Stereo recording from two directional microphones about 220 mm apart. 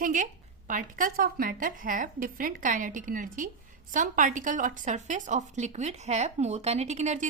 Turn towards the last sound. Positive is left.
turn(degrees=-30)  # may be behind; listen again after turning